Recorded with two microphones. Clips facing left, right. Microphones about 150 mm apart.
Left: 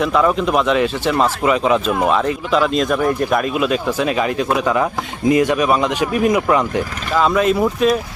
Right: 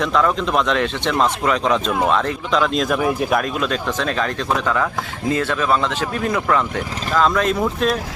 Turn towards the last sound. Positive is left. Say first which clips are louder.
# left 4 dB
turn(degrees=5)  # may be behind; listen again after turning